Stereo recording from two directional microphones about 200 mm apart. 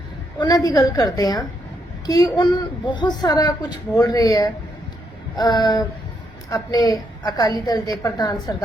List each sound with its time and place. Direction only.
0.3 s a woman's voice: 20° left (ahead or behind)